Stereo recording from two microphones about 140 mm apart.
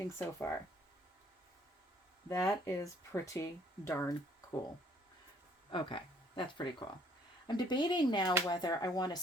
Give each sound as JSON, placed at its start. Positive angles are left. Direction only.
{"t": 0.0, "sound": "speech", "side_deg": 20}
{"t": 2.3, "sound": "speech", "side_deg": 20}
{"t": 5.7, "sound": "speech", "side_deg": 35}